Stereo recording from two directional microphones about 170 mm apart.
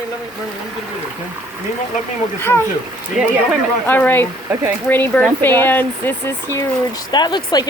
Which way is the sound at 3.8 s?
10° left (ahead or behind).